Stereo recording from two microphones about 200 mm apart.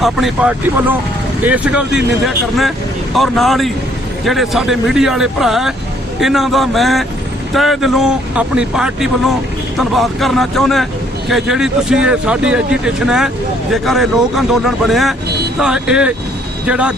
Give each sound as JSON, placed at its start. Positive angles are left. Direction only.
{"t": 0.0, "sound": "speech", "side_deg": 0}